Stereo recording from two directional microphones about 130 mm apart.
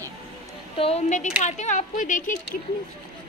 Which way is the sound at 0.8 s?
60° left (ahead or behind).